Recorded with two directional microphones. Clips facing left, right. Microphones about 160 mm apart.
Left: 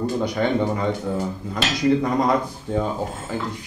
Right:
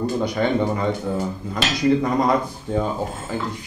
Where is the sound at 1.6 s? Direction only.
10° right (ahead or behind).